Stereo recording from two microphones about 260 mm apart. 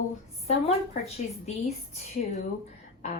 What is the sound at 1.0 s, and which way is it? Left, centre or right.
A woman's voice, left.